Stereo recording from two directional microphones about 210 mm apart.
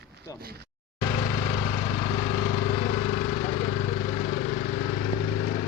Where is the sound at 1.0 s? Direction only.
45° left (ahead or behind).